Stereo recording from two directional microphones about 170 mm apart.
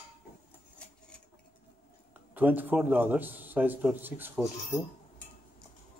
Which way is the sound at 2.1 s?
10° right (ahead or behind).